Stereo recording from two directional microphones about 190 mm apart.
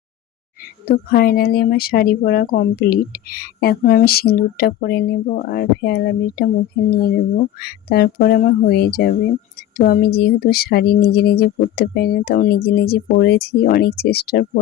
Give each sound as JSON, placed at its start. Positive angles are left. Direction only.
{"t": 0.9, "sound": "a woman's voice", "side_deg": 55}